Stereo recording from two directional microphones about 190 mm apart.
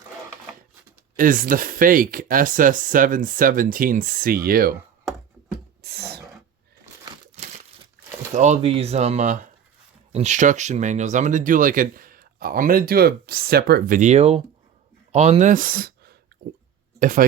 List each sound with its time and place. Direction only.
1.1 s speech: 45° right (ahead or behind)
5.8 s a sound: 55° right (ahead or behind)
6.9 s crumpling: 15° right (ahead or behind)
7.3 s crumpling: 40° right (ahead or behind)
8.3 s speech: 40° right (ahead or behind)